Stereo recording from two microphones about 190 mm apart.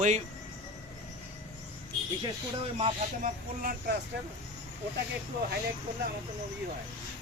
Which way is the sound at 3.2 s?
45° right (ahead or behind).